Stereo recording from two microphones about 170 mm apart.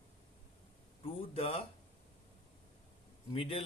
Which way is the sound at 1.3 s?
35° left (ahead or behind).